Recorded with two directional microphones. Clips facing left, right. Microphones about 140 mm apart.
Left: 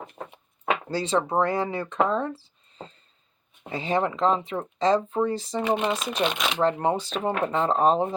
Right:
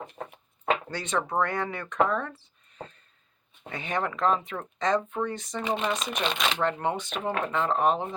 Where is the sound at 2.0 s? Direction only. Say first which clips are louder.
Left 2 dB; 30° left (ahead or behind).